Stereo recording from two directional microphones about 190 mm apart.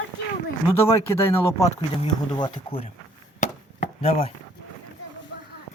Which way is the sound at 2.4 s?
30° left (ahead or behind).